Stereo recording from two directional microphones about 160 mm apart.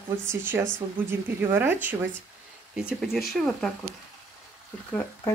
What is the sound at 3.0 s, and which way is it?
Speech, centre (ahead or behind).